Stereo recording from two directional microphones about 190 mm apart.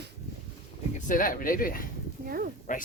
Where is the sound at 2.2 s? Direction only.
50° right (ahead or behind).